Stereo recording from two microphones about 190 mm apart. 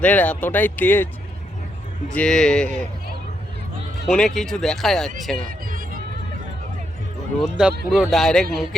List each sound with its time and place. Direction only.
0.0 s speech: 5° left (ahead or behind)
2.0 s speech: 5° left (ahead or behind)
4.0 s speech: centre (ahead or behind)
5.4 s a sound: 45° right (ahead or behind)
7.3 s speech: 5° right (ahead or behind)